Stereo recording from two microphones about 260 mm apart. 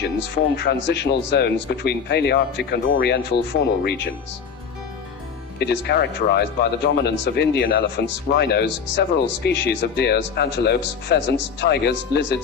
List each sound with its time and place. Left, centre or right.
0.5 s speech: left
5.5 s speech: left